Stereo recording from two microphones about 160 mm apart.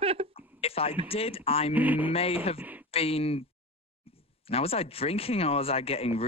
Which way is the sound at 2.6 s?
10° right (ahead or behind).